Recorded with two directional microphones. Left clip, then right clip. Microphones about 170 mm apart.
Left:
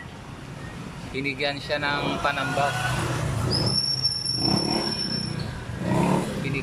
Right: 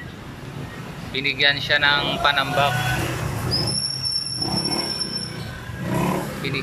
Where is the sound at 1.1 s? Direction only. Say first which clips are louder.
Right 8 dB; 15° left (ahead or behind).